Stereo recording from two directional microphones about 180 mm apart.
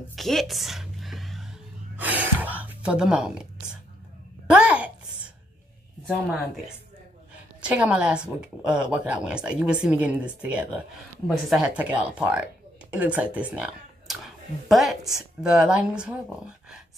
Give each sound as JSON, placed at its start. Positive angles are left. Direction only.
{"t": 0.1, "sound": "music", "side_deg": 0}
{"t": 2.0, "sound": "gasp", "side_deg": -10}
{"t": 4.5, "sound": "a sound", "side_deg": -5}
{"t": 7.6, "sound": "speech", "side_deg": -5}